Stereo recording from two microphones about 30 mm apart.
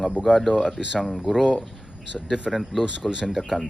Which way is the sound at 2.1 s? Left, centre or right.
Centre.